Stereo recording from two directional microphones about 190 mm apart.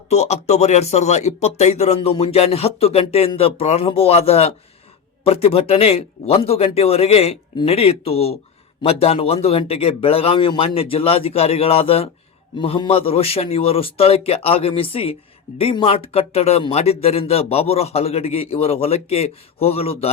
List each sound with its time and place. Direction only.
0.1 s speech: 35° left (ahead or behind)